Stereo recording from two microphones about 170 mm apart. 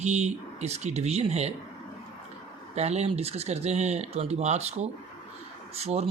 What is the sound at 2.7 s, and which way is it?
Speech, 40° right (ahead or behind).